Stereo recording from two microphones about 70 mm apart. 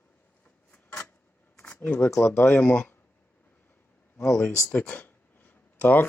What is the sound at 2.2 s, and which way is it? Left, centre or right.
Speech, left.